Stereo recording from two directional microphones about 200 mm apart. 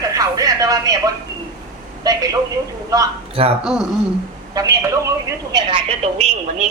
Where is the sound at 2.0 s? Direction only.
15° right (ahead or behind).